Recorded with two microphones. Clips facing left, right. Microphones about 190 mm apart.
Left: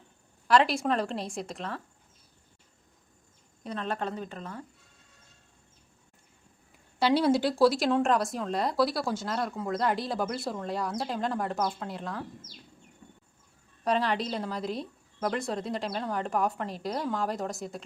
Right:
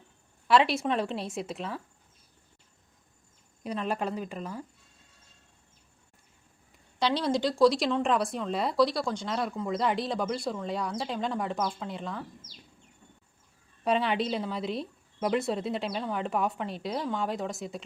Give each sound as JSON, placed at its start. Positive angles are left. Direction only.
{"t": 0.4, "sound": "speech", "side_deg": 0}
{"t": 3.6, "sound": "a woman's voice", "side_deg": -10}
{"t": 7.0, "sound": "speech", "side_deg": 10}
{"t": 13.8, "sound": "speech", "side_deg": -5}